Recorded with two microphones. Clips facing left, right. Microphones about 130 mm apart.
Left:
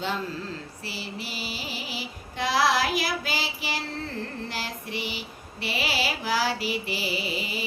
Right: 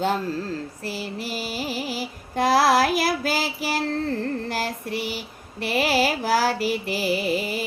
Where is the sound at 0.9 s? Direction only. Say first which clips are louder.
Right 5 dB; 45° right (ahead or behind).